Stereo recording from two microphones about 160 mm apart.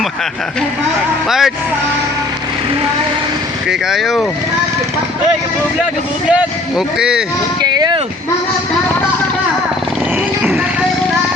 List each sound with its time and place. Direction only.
1.3 s speech: centre (ahead or behind)
3.7 s speech: centre (ahead or behind)
6.7 s speech: 5° right (ahead or behind)
7.6 s a sound: 25° right (ahead or behind)